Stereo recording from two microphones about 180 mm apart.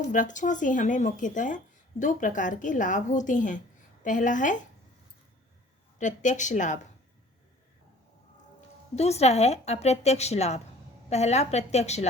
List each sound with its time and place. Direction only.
0.1 s speech: 45° left (ahead or behind)
6.0 s speech: 45° left (ahead or behind)
9.0 s a woman's voice: 35° left (ahead or behind)